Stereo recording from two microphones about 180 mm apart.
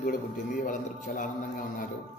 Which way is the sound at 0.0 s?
50° left (ahead or behind).